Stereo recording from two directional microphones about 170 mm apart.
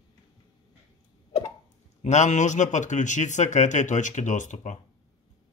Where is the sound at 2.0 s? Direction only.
45° left (ahead or behind).